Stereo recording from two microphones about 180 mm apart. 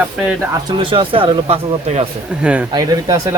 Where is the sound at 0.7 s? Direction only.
30° right (ahead or behind).